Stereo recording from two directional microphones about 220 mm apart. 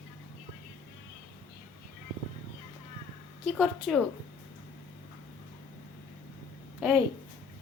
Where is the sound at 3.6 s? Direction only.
Centre (ahead or behind).